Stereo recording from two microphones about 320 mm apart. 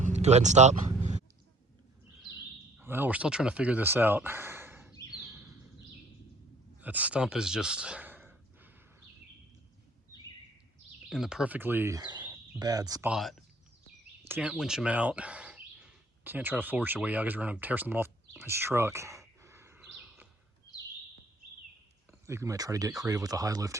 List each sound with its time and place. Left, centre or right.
0.0 s vehicle: right
2.4 s speech: centre
5.1 s a sound: centre
6.8 s speech: centre
11.1 s speech: centre
22.3 s speech: centre